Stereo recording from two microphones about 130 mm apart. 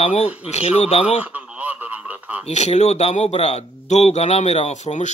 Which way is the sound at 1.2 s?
10° right (ahead or behind).